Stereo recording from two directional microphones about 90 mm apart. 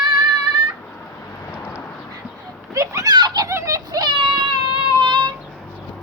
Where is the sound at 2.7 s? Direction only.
40° right (ahead or behind).